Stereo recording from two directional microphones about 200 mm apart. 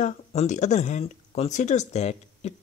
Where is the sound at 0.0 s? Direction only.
35° left (ahead or behind).